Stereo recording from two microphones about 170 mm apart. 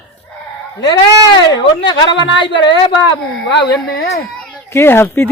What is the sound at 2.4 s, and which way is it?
Speech, 25° left (ahead or behind).